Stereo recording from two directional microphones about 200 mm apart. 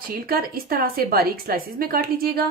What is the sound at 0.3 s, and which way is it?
A woman's voice, 45° right (ahead or behind).